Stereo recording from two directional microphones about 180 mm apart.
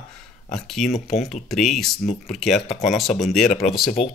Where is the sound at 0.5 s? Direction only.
Centre (ahead or behind).